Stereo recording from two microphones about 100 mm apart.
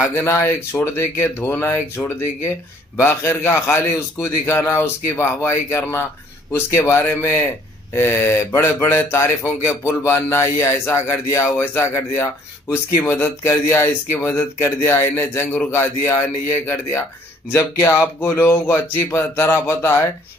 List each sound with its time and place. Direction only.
0.1 s a man's voice: 25° left (ahead or behind)
17.5 s a man's voice: 30° left (ahead or behind)